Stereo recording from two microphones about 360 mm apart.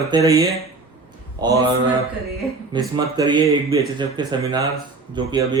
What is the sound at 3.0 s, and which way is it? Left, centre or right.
A man's voice, centre.